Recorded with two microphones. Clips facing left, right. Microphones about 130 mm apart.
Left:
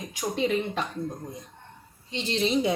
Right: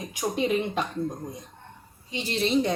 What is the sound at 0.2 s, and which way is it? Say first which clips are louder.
Speech: right 1 dB; 15° right (ahead or behind).